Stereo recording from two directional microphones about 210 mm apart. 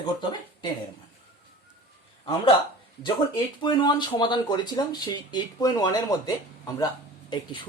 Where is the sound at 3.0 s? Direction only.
20° left (ahead or behind).